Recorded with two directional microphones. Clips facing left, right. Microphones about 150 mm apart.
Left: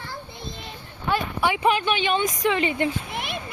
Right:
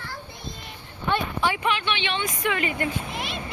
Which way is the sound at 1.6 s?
40° left (ahead or behind).